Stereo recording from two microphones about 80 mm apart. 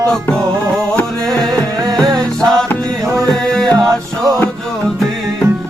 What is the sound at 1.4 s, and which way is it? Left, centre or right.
Music, right.